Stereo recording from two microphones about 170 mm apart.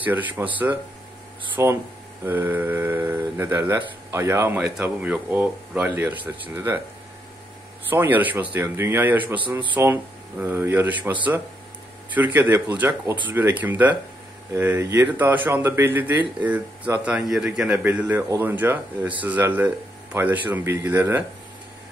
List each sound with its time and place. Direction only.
0.0 s speech: 10° right (ahead or behind)
7.9 s speech: 10° right (ahead or behind)
12.1 s speech: 10° right (ahead or behind)